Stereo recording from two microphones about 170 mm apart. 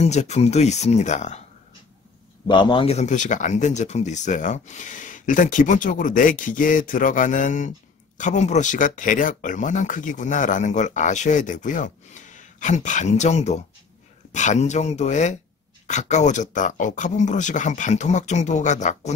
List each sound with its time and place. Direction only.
0.0 s speech: 40° left (ahead or behind)
2.4 s speech: 25° left (ahead or behind); by 19.1 s 45° left (ahead or behind)